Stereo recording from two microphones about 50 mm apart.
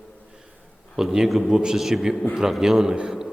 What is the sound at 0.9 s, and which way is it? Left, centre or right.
A man's voice, centre.